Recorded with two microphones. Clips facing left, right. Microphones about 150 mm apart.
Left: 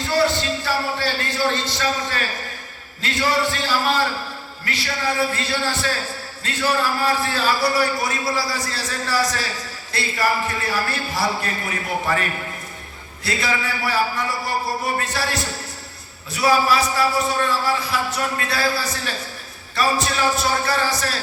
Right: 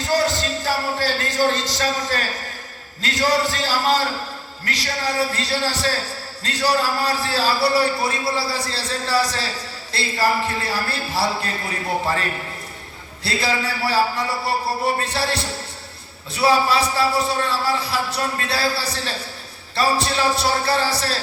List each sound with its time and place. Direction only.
0.0 s a sound: 40° right (ahead or behind)
0.3 s a man's voice: 40° right (ahead or behind)
13.2 s a man's voice: 30° right (ahead or behind)